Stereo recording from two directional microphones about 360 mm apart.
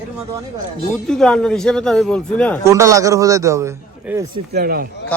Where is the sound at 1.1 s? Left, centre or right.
Centre.